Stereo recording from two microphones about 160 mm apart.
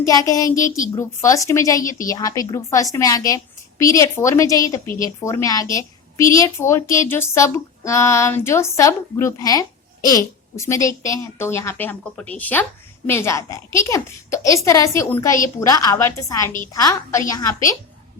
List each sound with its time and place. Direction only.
0.0 s a woman's voice: 20° left (ahead or behind)